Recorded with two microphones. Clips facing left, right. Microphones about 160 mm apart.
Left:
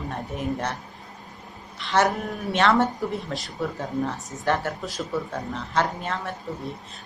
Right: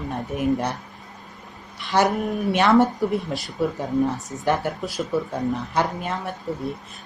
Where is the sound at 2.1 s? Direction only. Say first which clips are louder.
Right 4 dB; 15° right (ahead or behind).